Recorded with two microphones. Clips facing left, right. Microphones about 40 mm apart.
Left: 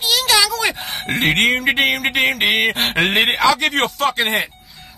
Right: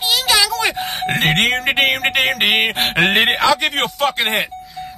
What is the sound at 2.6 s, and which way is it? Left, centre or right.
Speech, centre.